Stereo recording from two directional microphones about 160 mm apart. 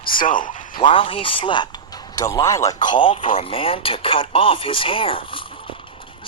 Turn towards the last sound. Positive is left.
turn(degrees=35)  # may be behind; listen again after turning